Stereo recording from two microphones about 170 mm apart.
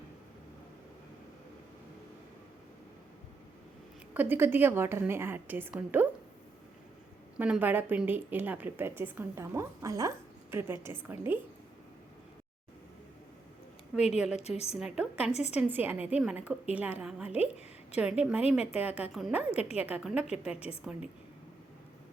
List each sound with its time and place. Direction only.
4.1 s a woman's voice: 10° right (ahead or behind)
7.3 s a woman's voice: 10° right (ahead or behind)
13.9 s a woman's voice: 5° right (ahead or behind)
14.3 s a woman's voice: 40° left (ahead or behind)
14.8 s a woman's voice: 5° right (ahead or behind)
15.3 s a woman's voice: 40° left (ahead or behind)
15.7 s a woman's voice: 10° right (ahead or behind)